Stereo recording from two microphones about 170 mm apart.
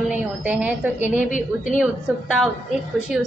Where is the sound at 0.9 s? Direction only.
45° left (ahead or behind).